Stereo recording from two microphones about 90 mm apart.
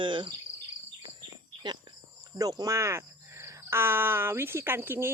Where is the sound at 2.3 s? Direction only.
45° right (ahead or behind).